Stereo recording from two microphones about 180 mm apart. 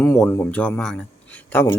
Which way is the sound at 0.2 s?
10° left (ahead or behind).